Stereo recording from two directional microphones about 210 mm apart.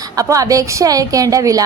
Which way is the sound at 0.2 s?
15° right (ahead or behind).